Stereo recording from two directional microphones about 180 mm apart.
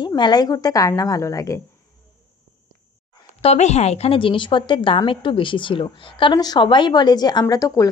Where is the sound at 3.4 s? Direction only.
40° left (ahead or behind); by 7.9 s 20° left (ahead or behind).